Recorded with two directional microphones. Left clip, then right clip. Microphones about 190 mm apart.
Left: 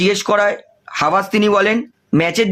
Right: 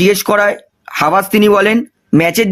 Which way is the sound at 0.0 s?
45° right (ahead or behind).